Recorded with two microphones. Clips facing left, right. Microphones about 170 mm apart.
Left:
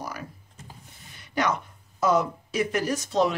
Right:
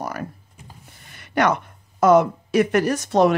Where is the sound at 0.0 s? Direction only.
55° right (ahead or behind).